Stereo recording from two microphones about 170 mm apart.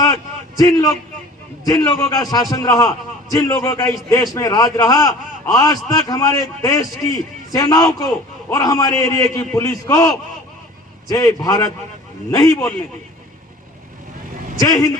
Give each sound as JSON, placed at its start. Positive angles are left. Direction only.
{"t": 0.0, "sound": "a sound", "side_deg": 20}
{"t": 1.6, "sound": "a man's voice", "side_deg": 20}
{"t": 14.6, "sound": "a man's voice", "side_deg": 20}